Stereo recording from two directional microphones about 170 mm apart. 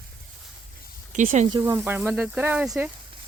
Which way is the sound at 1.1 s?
50° right (ahead or behind).